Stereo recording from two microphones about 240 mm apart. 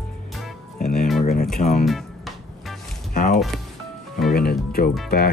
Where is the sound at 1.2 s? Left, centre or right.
Left.